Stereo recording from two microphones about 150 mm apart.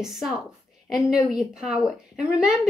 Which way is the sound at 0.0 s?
Centre (ahead or behind).